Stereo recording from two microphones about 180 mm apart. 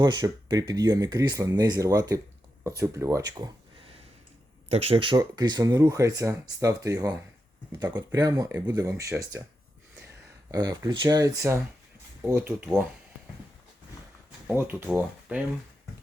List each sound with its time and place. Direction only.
0.0 s speech: 25° right (ahead or behind)
4.7 s speech: 35° right (ahead or behind); by 9.4 s 15° right (ahead or behind)
10.5 s speech: 20° right (ahead or behind)
14.4 s speech: 10° right (ahead or behind)